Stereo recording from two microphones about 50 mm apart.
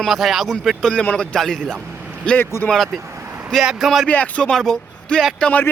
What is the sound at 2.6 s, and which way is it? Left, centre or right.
Speech, centre.